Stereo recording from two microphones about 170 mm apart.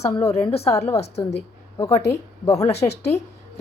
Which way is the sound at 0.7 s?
15° left (ahead or behind).